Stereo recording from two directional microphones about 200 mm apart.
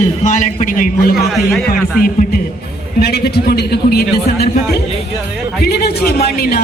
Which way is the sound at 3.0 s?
55° left (ahead or behind).